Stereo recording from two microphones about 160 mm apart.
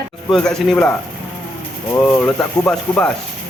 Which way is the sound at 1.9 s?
10° left (ahead or behind).